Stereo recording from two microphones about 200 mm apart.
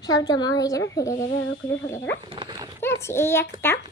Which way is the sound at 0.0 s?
20° left (ahead or behind).